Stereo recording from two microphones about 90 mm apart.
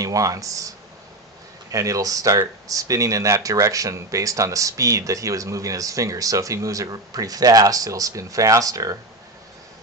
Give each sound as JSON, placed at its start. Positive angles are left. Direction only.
{"t": 0.0, "sound": "speech", "side_deg": -40}